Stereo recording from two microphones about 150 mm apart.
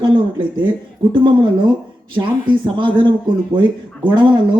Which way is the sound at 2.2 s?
30° right (ahead or behind).